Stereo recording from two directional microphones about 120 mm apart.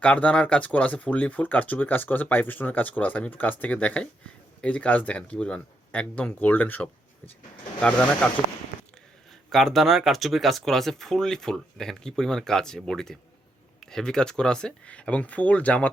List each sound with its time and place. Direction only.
0.0 s speech: 10° left (ahead or behind)
9.5 s speech: centre (ahead or behind)